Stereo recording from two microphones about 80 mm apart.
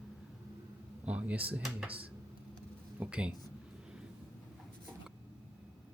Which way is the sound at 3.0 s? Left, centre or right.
Centre.